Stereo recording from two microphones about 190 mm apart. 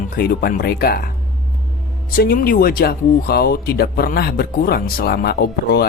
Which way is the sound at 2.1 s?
50° left (ahead or behind).